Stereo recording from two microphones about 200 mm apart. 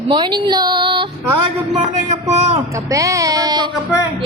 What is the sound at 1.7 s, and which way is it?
Speech, 35° right (ahead or behind).